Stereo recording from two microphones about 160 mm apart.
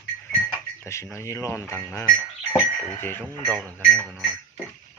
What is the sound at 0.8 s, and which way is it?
Speech, 15° left (ahead or behind).